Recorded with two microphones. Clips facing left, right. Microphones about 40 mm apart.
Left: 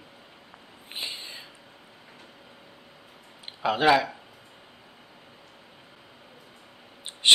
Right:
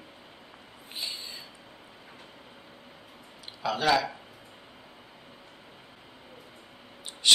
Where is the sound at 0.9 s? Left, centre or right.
Left.